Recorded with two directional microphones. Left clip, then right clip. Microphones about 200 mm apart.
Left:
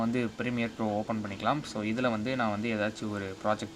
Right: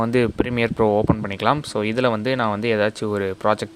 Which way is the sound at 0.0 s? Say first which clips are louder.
Right 12 dB; 50° right (ahead or behind).